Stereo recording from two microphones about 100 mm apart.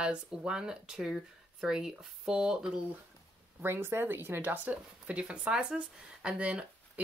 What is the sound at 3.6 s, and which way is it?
Speech, 25° right (ahead or behind).